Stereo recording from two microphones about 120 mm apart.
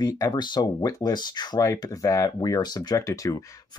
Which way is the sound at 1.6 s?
25° left (ahead or behind).